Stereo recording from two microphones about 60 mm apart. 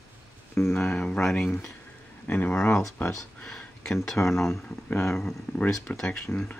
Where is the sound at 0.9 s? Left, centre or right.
Centre; by 3.1 s left.